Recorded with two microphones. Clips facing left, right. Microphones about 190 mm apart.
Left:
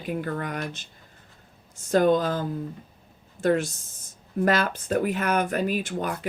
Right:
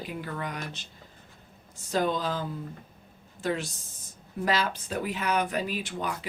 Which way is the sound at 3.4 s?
50° left (ahead or behind).